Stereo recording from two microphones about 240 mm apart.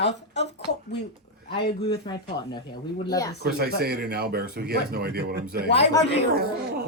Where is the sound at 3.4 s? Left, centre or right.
Right.